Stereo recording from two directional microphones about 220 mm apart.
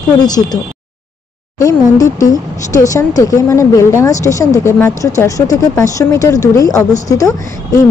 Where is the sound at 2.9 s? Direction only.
15° left (ahead or behind).